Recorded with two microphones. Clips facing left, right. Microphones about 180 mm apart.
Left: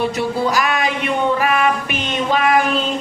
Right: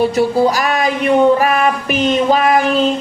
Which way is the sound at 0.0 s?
35° right (ahead or behind).